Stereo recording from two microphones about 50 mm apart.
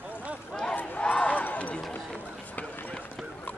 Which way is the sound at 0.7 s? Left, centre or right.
Left.